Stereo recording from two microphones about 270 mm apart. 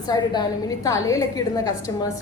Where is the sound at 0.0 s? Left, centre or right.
Centre.